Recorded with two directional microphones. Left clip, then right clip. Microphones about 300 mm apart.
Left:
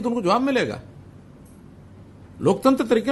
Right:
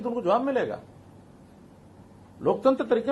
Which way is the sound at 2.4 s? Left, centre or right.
Left.